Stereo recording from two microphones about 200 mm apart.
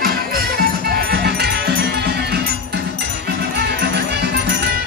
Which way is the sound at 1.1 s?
55° right (ahead or behind).